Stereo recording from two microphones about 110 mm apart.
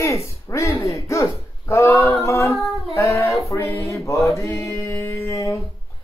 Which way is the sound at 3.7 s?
25° left (ahead or behind).